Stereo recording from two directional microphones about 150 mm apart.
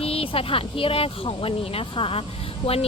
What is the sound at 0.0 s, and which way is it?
Speech, 40° left (ahead or behind).